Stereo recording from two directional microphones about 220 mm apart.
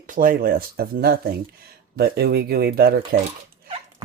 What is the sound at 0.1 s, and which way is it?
Speech, 40° right (ahead or behind).